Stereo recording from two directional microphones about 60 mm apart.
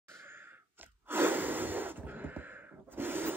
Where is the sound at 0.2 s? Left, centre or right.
Right.